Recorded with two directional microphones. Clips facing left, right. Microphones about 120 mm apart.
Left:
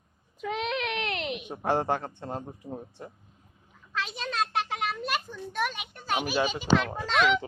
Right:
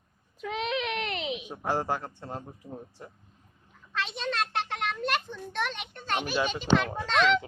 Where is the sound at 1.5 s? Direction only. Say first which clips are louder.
Left 4 dB; 25° left (ahead or behind).